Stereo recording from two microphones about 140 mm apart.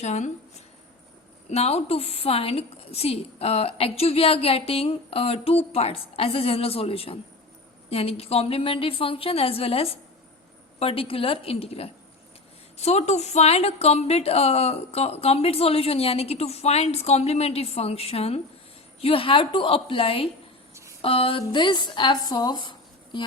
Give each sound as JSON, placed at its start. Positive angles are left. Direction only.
{"t": 0.0, "sound": "speech", "side_deg": 55}
{"t": 1.5, "sound": "a woman's voice", "side_deg": 45}